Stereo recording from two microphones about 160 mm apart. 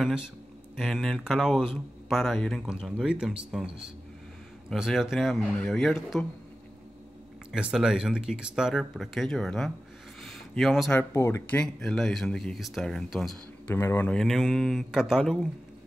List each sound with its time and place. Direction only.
0.7 s speech: centre (ahead or behind)
7.5 s speech: 5° right (ahead or behind)
10.2 s a sound: centre (ahead or behind)
10.9 s speech: 15° left (ahead or behind)
13.7 s speech: 15° left (ahead or behind)